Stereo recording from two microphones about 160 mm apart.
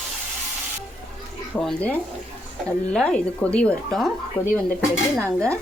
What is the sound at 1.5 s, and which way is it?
Speech, 5° left (ahead or behind).